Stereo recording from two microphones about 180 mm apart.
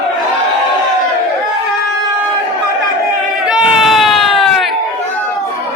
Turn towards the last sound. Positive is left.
turn(degrees=0)  # may be behind; listen again after turning